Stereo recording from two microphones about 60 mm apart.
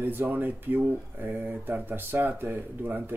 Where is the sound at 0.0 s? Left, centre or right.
Right.